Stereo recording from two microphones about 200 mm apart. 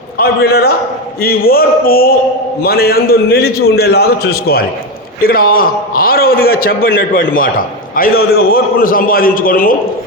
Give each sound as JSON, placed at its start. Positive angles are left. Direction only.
{"t": 0.2, "sound": "a man's voice", "side_deg": 50}